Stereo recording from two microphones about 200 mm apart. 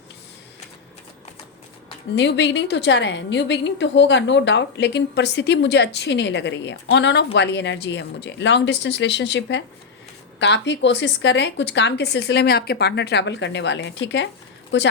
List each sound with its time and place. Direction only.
2.1 s a woman's voice: 60° left (ahead or behind)